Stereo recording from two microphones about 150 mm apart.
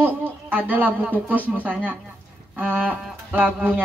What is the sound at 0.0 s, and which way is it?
Speech, 10° right (ahead or behind).